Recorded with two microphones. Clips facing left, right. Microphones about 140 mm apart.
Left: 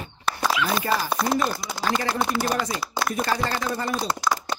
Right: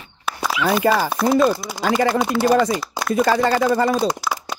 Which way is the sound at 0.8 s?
90° right.